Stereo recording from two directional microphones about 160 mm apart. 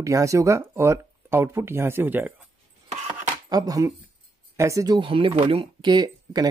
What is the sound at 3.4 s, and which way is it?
Speech, 25° right (ahead or behind).